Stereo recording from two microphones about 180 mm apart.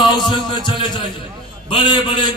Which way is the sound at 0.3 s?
25° left (ahead or behind).